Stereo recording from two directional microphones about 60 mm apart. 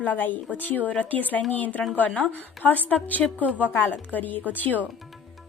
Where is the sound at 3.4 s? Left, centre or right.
Right.